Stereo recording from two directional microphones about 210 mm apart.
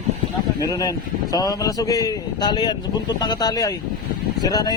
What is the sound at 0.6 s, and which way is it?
A man's voice, 15° left (ahead or behind).